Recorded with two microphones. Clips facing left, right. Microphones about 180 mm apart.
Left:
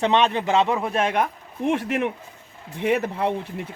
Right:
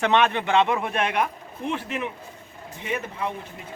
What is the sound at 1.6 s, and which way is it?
Speech, 70° left (ahead or behind).